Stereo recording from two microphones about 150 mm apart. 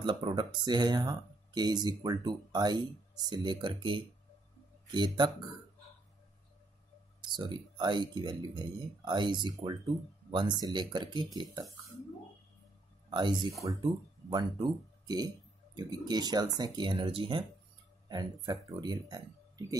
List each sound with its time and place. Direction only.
0.0 s speech: 35° right (ahead or behind)
7.2 s speech: 30° right (ahead or behind)
13.1 s speech: 30° right (ahead or behind)